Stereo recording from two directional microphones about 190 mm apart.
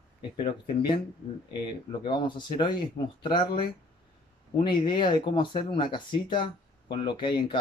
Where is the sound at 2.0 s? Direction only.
25° left (ahead or behind).